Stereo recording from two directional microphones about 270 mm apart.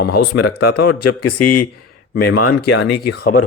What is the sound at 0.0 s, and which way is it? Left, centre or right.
Speech, left.